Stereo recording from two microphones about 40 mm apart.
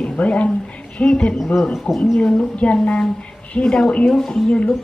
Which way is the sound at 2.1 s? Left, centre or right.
Left.